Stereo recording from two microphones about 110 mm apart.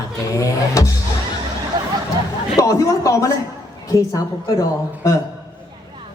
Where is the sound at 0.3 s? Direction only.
30° left (ahead or behind).